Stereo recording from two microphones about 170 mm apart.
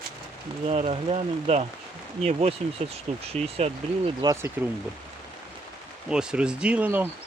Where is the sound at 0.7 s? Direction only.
40° right (ahead or behind).